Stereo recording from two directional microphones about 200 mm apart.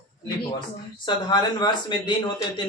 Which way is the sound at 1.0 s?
20° left (ahead or behind).